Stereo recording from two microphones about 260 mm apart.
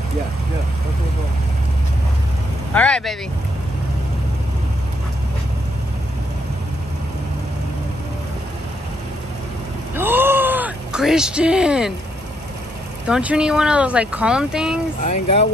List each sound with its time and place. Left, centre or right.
2.7 s speech: centre
9.9 s groan: centre
13.0 s speech: centre
15.0 s speech: left